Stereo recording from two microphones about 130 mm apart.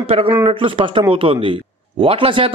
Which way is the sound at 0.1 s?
50° right (ahead or behind).